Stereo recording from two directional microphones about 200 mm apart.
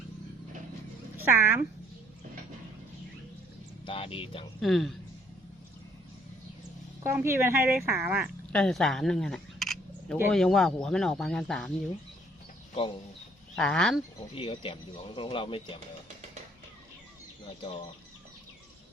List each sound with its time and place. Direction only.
1.1 s speech: 10° right (ahead or behind)
3.8 s speech: 25° left (ahead or behind)
4.6 s speech: centre (ahead or behind)
7.0 s speech: 10° right (ahead or behind)
8.5 s speech: centre (ahead or behind)
13.6 s speech: 5° left (ahead or behind)
14.3 s speech: 25° left (ahead or behind)